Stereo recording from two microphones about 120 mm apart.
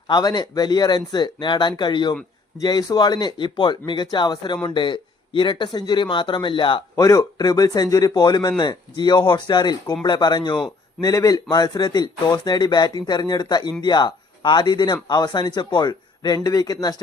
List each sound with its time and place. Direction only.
0.1 s speech: 35° left (ahead or behind)
6.9 s speech: 25° left (ahead or behind)